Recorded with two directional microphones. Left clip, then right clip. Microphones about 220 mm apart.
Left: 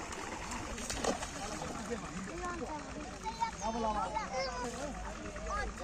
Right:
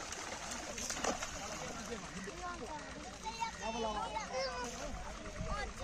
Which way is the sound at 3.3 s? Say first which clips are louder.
Left 4 dB; 50° right (ahead or behind).